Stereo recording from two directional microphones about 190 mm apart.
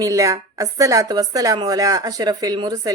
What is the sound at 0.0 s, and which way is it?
Speech, 15° right (ahead or behind).